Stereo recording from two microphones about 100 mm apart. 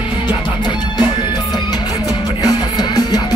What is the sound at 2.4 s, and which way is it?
Music, 40° left (ahead or behind).